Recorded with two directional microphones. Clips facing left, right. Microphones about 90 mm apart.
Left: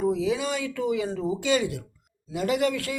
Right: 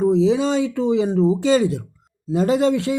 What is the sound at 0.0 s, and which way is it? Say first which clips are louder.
Speech: right 8 dB; 30° right (ahead or behind).